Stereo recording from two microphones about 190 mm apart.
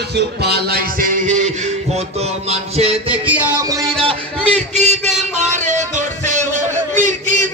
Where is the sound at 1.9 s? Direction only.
35° right (ahead or behind).